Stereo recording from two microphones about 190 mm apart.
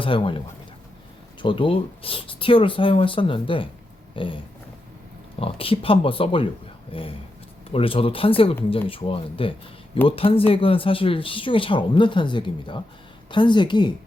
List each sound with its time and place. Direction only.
0.0 s speech: 25° left (ahead or behind)
4.1 s a sound: 25° left (ahead or behind)
5.4 s speech: 30° left (ahead or behind)